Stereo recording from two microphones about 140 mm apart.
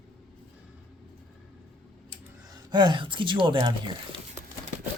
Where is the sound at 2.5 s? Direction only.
35° right (ahead or behind).